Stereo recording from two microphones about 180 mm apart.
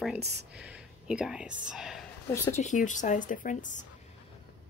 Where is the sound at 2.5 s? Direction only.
45° left (ahead or behind).